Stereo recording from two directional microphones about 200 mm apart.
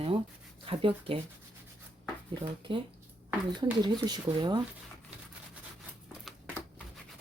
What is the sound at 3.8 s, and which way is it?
Speech, 20° right (ahead or behind).